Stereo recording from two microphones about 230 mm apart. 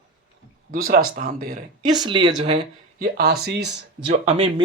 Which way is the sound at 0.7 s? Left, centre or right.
Right.